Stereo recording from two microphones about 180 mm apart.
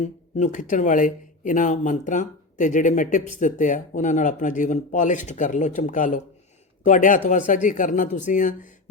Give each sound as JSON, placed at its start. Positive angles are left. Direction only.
{"t": 0.0, "sound": "speech", "side_deg": 40}